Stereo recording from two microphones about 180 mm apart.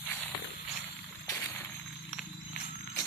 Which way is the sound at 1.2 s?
15° left (ahead or behind).